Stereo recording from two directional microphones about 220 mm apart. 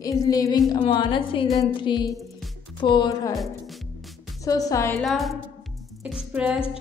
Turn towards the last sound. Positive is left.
turn(degrees=-5)  # may be behind; listen again after turning